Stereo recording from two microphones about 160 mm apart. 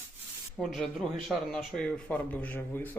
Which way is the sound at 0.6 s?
Centre (ahead or behind).